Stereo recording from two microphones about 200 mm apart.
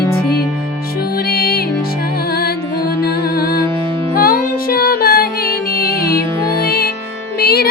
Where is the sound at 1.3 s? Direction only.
50° left (ahead or behind).